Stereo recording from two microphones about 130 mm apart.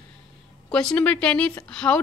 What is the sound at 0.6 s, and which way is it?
Speech, 5° left (ahead or behind).